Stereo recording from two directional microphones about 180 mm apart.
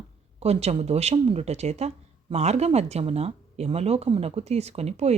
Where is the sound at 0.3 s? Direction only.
35° right (ahead or behind).